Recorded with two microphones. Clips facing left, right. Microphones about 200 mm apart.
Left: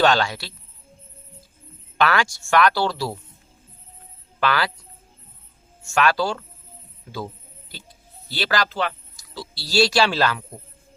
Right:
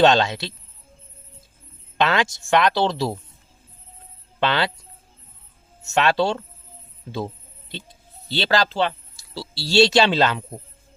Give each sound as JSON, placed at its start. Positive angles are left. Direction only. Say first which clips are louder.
{"t": 0.0, "sound": "speech", "louder": "right 3 dB", "side_deg": -20}
{"t": 2.0, "sound": "speech", "louder": "even", "side_deg": -20}
{"t": 4.4, "sound": "speech", "louder": "right 1 dB", "side_deg": -25}
{"t": 5.8, "sound": "speech", "louder": "right 1 dB", "side_deg": -25}
{"t": 8.3, "sound": "speech", "louder": "right 3 dB", "side_deg": -25}